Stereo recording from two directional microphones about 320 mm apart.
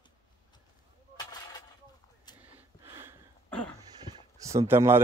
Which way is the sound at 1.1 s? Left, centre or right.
Centre.